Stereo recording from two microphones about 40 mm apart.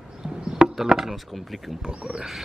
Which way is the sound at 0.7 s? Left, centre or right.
Centre.